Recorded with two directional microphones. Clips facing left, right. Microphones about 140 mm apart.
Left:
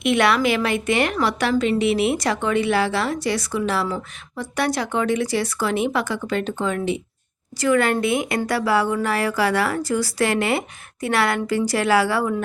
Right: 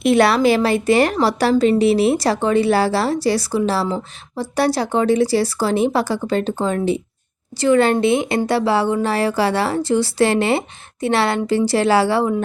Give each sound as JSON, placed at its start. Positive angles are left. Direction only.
{"t": 0.0, "sound": "a woman's voice", "side_deg": -35}